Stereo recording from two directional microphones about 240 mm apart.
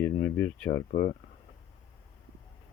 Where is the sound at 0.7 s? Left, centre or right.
Left.